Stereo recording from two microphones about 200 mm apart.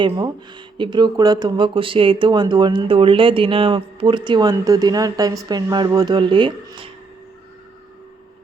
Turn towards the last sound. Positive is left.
turn(degrees=-25)  # may be behind; listen again after turning